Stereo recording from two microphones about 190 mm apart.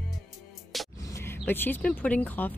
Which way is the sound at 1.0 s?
15° left (ahead or behind).